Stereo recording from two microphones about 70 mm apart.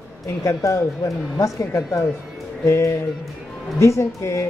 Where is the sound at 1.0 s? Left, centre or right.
Left.